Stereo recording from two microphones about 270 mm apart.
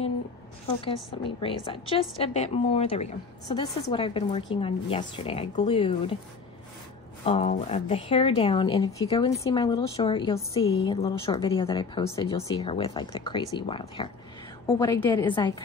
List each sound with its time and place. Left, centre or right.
0.7 s a woman's voice: centre
7.2 s a woman's voice: left